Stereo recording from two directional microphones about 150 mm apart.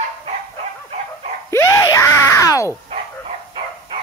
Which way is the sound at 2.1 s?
20° left (ahead or behind).